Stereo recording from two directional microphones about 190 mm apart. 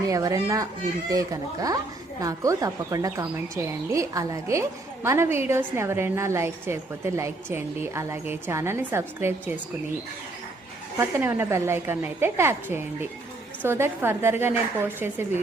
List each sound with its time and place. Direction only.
0.1 s a woman's voice: 15° right (ahead or behind)
10.9 s a woman's voice: 10° right (ahead or behind)